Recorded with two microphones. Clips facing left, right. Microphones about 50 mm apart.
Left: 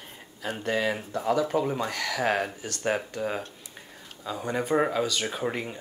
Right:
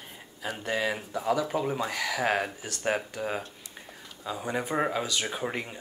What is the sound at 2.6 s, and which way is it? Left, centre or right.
Speech, centre.